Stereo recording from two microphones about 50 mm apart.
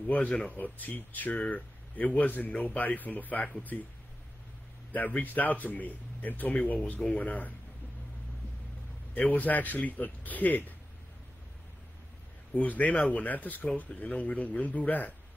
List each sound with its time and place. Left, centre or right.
0.0 s speech: left
4.9 s speech: left
9.1 s speech: left
12.5 s speech: left